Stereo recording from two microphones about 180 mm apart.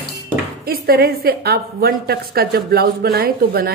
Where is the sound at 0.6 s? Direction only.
55° right (ahead or behind).